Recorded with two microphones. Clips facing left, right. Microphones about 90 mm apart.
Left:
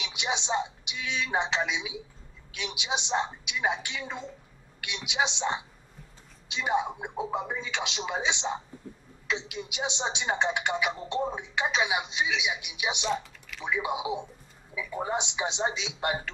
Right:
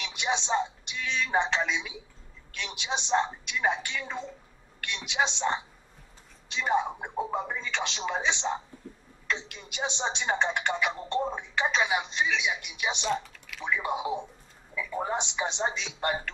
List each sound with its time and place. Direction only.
0.0 s a woman's voice: 10° left (ahead or behind)
6.5 s speech: 10° left (ahead or behind)